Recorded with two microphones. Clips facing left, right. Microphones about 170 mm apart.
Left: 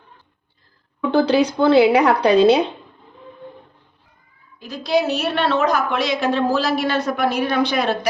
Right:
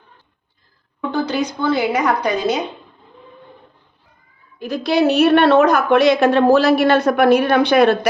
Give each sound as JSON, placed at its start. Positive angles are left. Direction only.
{"t": 1.1, "sound": "speech", "side_deg": 30}
{"t": 4.6, "sound": "speech", "side_deg": -65}